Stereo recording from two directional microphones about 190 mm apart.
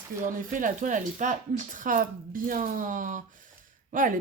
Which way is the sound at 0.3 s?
45° right (ahead or behind).